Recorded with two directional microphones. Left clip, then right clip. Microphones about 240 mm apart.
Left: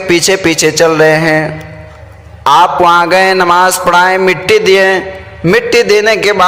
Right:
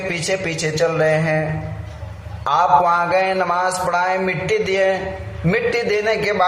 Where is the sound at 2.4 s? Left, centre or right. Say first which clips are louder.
Left 8 dB; left.